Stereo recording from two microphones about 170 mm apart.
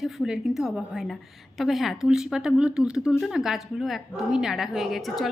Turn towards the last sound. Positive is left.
turn(degrees=0)  # may be behind; listen again after turning